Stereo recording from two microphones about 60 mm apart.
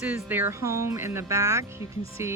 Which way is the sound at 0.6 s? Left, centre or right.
Right.